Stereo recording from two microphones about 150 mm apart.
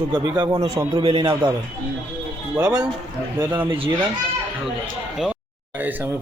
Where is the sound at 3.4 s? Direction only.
10° right (ahead or behind).